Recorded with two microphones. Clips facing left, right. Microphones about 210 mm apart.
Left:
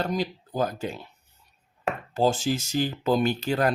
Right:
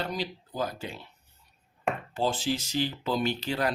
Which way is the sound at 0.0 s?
45° left (ahead or behind).